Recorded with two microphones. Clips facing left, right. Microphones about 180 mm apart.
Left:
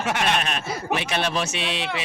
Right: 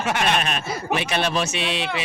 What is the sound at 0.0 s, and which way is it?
Speech, 45° right (ahead or behind).